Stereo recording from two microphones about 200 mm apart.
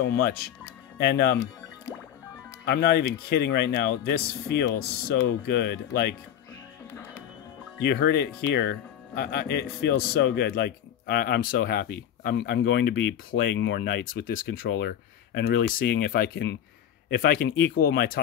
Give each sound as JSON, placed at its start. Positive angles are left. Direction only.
{"t": 0.0, "sound": "speech", "side_deg": 55}
{"t": 2.6, "sound": "speech", "side_deg": 55}
{"t": 7.8, "sound": "speech", "side_deg": 55}